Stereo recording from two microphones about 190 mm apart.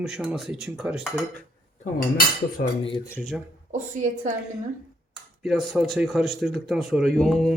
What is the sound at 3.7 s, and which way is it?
Speech, 40° right (ahead or behind).